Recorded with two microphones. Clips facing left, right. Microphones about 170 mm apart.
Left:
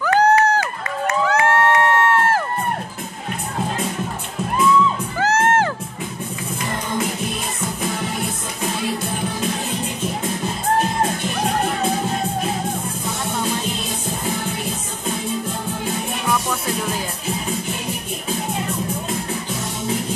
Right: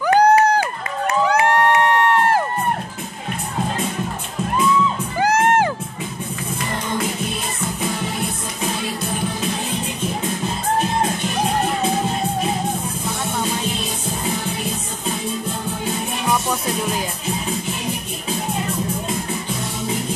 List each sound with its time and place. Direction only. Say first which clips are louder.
0.0 s run: right 2 dB; 15° right (ahead or behind)
1.2 s crowd: right 1 dB; 15° right (ahead or behind)
5.2 s music: right 1 dB; 15° right (ahead or behind)